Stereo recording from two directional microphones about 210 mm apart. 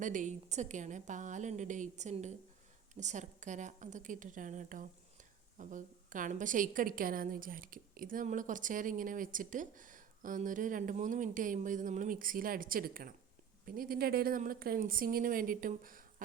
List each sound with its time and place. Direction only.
0.0 s a woman's voice: 35° right (ahead or behind)